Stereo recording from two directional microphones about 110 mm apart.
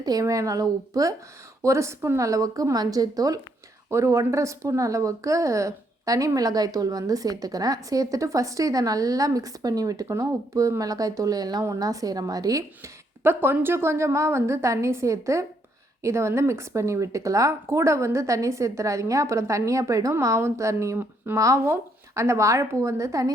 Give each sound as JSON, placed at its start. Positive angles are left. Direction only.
{"t": 0.0, "sound": "a woman's voice", "side_deg": -35}